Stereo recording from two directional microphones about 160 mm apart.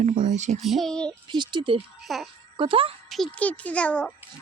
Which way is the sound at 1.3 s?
30° right (ahead or behind).